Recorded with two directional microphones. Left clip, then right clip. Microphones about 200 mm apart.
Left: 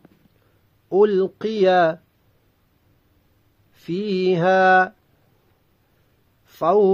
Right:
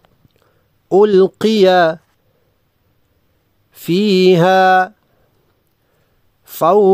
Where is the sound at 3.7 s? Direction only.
50° right (ahead or behind).